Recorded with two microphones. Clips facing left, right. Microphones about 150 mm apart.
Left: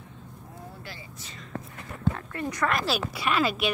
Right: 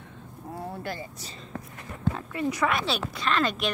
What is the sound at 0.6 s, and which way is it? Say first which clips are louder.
Vehicle: right 9 dB; 70° right (ahead or behind).